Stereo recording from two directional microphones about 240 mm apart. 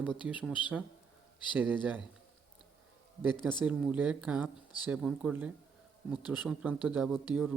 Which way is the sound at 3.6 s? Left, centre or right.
Centre.